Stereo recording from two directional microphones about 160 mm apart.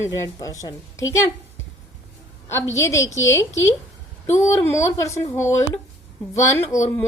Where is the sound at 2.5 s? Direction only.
15° left (ahead or behind).